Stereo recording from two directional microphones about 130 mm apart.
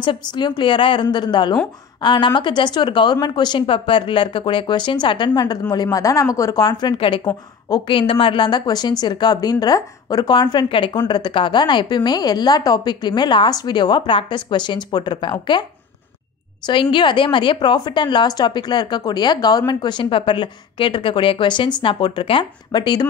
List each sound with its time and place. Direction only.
0.0 s a woman's voice: 35° left (ahead or behind)
16.6 s a woman's voice: 35° left (ahead or behind)